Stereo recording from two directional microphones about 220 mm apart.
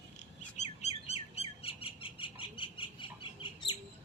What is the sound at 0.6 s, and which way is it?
Bird, 30° left (ahead or behind).